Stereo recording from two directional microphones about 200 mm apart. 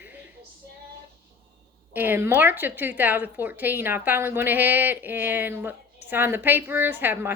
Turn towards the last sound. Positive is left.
turn(degrees=-10)  # may be behind; listen again after turning